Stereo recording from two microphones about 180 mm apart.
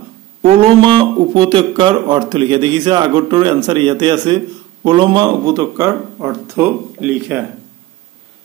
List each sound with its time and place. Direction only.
0.4 s a man's voice: 30° right (ahead or behind); by 7.4 s 5° right (ahead or behind)